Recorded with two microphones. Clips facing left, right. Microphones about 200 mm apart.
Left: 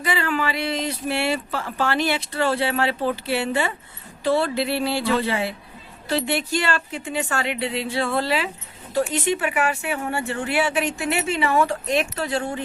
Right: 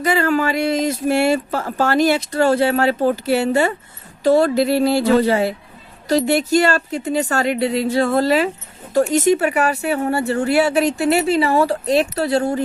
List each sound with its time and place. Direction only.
0.0 s speech: 45° right (ahead or behind)